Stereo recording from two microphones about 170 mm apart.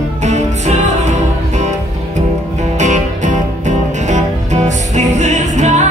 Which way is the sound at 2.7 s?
45° right (ahead or behind).